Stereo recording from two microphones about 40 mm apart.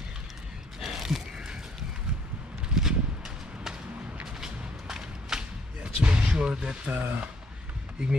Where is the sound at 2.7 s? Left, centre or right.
Centre.